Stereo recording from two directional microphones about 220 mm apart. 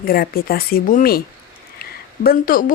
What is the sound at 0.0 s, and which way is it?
Speech, 40° left (ahead or behind).